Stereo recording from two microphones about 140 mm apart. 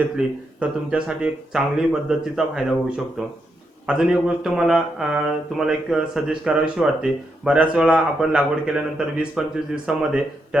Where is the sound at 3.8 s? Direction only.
5° right (ahead or behind).